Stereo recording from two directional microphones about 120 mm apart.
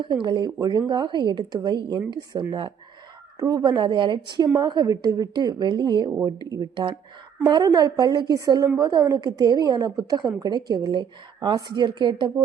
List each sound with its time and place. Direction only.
0.0 s a woman's voice: 40° right (ahead or behind)